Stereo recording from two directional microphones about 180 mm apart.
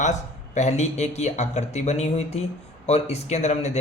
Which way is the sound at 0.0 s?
40° left (ahead or behind).